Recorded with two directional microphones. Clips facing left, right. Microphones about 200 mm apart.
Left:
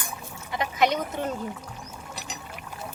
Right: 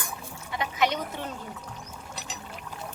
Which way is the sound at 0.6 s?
45° left (ahead or behind).